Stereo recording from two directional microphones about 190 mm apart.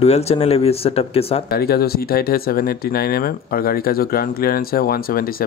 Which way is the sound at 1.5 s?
55° left (ahead or behind).